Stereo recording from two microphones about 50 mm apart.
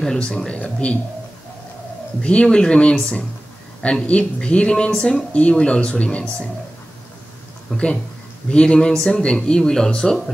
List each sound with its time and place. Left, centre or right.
0.0 s speech: centre
2.2 s speech: centre
7.7 s speech: left